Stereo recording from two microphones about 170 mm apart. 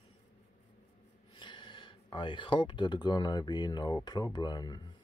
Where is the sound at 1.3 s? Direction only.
25° left (ahead or behind).